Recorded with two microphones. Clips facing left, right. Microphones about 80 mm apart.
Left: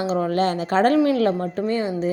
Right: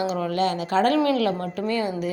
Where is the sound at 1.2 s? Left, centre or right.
Left.